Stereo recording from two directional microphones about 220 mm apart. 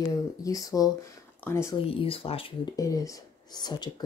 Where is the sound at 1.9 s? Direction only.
25° left (ahead or behind).